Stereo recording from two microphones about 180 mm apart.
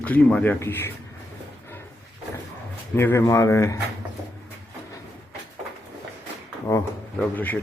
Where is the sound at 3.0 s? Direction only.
15° left (ahead or behind).